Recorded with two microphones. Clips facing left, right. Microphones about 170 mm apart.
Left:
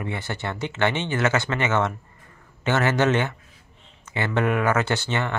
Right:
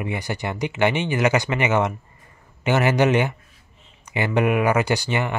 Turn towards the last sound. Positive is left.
turn(degrees=-15)  # may be behind; listen again after turning